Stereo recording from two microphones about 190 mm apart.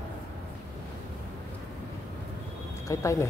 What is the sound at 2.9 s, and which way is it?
Speech, 15° left (ahead or behind).